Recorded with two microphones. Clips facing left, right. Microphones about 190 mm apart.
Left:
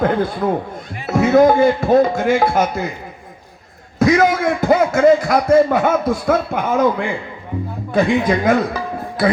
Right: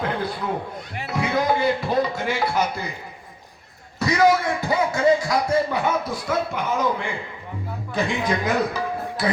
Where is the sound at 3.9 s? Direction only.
50° left (ahead or behind).